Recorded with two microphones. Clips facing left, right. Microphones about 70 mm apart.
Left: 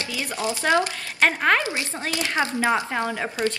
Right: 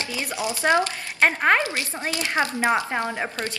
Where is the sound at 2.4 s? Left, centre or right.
Right.